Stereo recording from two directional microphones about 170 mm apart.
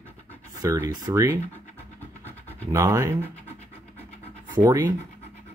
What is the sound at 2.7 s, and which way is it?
Speech, 20° right (ahead or behind).